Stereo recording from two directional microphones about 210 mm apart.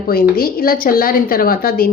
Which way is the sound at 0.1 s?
45° left (ahead or behind).